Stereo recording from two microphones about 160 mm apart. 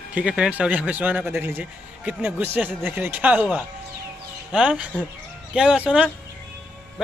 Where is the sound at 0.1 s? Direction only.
5° right (ahead or behind).